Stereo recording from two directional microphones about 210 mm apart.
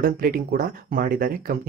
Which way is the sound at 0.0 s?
45° right (ahead or behind).